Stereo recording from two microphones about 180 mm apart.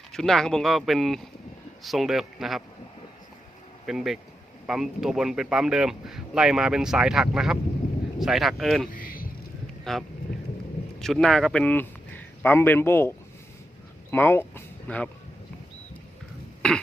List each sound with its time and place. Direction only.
0.1 s a man's voice: centre (ahead or behind)
3.8 s a man's voice: centre (ahead or behind)
9.0 s a sound: 50° left (ahead or behind)
9.9 s a man's voice: centre (ahead or behind)